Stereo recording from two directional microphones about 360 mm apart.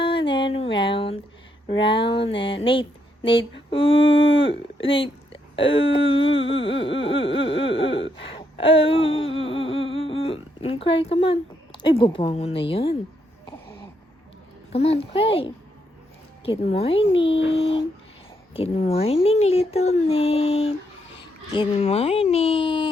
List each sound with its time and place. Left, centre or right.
0.0 s music: centre
1.6 s speech: centre
8.2 s a sound: centre
10.0 s speech: centre
14.7 s speech: centre